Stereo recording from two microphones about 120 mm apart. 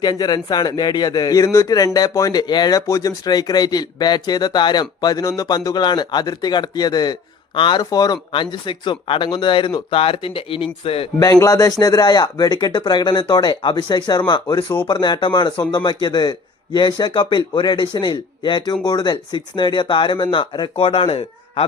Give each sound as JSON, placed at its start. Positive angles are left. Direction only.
{"t": 0.0, "sound": "speech", "side_deg": 35}
{"t": 11.2, "sound": "speech", "side_deg": 30}